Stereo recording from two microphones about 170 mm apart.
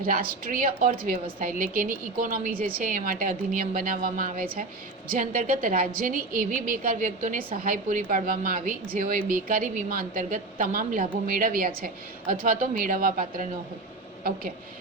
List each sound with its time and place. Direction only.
0.0 s a woman's voice: 60° right (ahead or behind)